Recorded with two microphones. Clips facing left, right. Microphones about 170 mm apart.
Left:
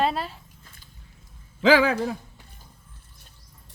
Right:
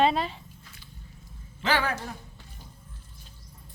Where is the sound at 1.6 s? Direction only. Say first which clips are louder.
Left 9 dB; 90° left.